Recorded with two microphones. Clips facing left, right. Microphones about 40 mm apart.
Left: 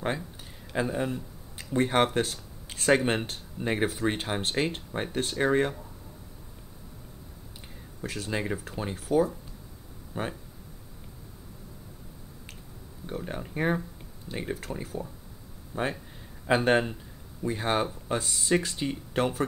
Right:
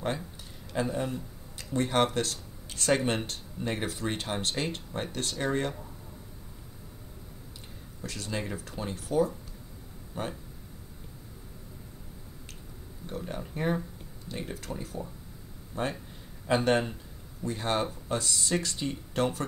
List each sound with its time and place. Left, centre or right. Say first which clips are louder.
0.7 s speech: left 2 dB; centre
8.0 s speech: left 3 dB; centre
13.0 s speech: left 2 dB; centre
15.7 s speech: left 2 dB; centre